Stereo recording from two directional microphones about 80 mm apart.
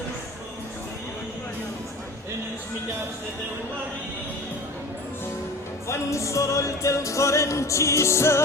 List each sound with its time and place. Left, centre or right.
5.9 s music: left